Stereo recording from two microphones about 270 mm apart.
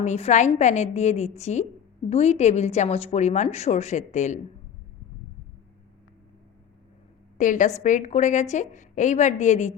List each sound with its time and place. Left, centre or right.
0.0 s a woman's voice: left
7.3 s a woman's voice: left